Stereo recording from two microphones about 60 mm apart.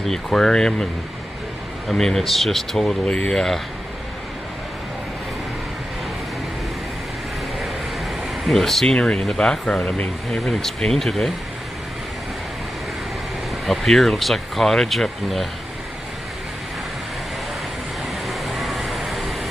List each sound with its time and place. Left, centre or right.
0.0 s speech: centre
1.9 s speech: centre
8.0 s a sound: centre
8.9 s speech: centre
10.4 s speech: centre
13.7 s speech: centre
18.2 s vehicle: centre